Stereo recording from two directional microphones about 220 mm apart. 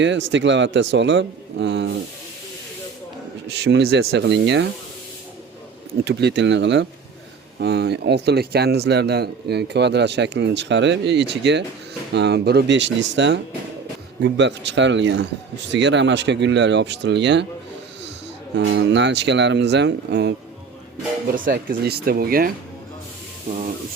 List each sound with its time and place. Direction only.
0.0 s speech: 55° right (ahead or behind)
3.6 s a man's voice: 50° right (ahead or behind)
6.1 s a man's voice: 50° right (ahead or behind)
18.5 s a man's voice: 55° right (ahead or behind)
21.3 s speech: 40° right (ahead or behind)